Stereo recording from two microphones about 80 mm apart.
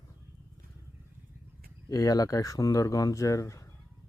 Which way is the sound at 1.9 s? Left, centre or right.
Left.